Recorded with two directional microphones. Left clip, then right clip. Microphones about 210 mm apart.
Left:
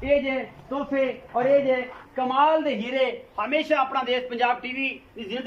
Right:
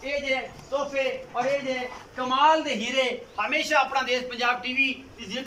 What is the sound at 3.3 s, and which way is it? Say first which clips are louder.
A man's voice: right 3 dB; 30° left (ahead or behind).